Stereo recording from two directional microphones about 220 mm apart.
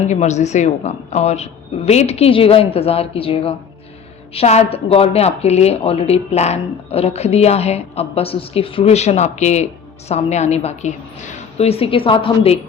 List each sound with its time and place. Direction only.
0.1 s a woman's voice: 30° left (ahead or behind)